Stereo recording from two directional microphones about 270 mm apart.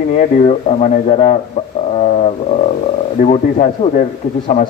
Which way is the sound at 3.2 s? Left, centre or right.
Left.